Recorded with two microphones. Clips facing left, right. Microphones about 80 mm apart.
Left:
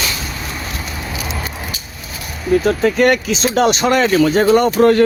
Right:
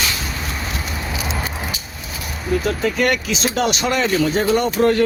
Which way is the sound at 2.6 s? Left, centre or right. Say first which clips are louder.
Left 5 dB; left.